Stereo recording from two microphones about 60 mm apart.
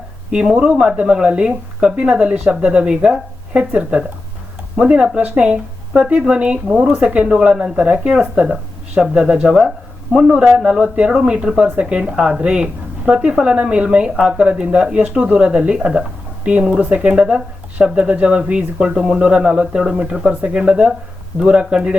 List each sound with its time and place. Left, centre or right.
0.3 s speech: centre
11.1 s speech: centre
20.2 s speech: right